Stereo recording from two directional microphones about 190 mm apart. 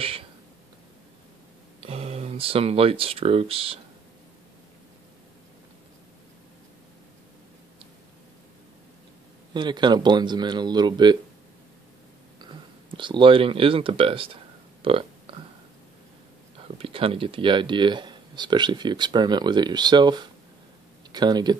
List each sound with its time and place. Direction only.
1.8 s speech: 30° right (ahead or behind)
9.5 s speech: 25° right (ahead or behind)
12.4 s a sound: 25° right (ahead or behind)
16.6 s speech: 30° right (ahead or behind)